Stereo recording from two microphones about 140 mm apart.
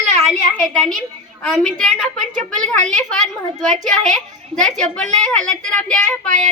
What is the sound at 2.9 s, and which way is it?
A woman's voice, 5° left (ahead or behind).